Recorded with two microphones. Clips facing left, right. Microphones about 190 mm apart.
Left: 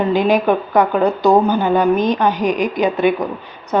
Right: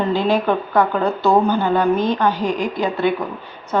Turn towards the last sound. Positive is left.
turn(degrees=15)  # may be behind; listen again after turning